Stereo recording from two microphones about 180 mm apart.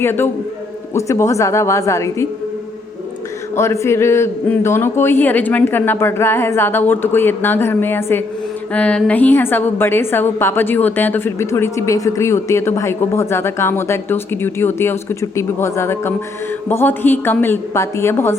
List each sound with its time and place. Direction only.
0.0 s a woman's voice: 15° left (ahead or behind)
3.5 s a woman's voice: 15° left (ahead or behind)